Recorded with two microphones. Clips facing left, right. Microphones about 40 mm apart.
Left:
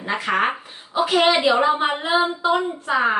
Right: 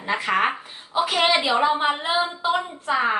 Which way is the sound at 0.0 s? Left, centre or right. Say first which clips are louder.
Left 1 dB; centre.